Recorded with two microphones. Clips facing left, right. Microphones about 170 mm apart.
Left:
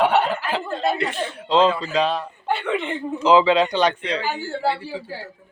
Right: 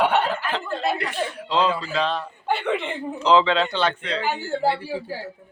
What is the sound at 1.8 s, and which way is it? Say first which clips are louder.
Speech: left 3 dB; 20° left (ahead or behind).